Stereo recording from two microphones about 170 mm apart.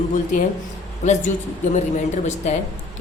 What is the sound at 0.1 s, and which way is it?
Speech, 50° left (ahead or behind).